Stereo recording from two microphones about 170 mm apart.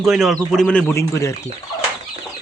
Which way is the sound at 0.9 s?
15° left (ahead or behind).